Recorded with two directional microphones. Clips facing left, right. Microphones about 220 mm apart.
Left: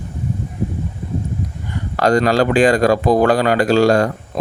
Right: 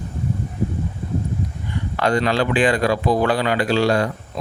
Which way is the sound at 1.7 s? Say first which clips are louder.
Left 5 dB; 40° left (ahead or behind).